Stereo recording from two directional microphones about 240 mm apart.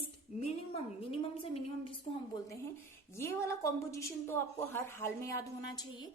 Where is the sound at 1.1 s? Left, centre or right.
Left.